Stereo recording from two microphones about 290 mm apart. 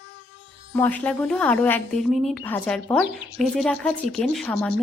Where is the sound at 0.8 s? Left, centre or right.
Centre.